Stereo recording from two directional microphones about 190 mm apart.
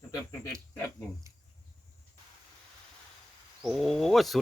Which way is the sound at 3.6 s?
Centre (ahead or behind).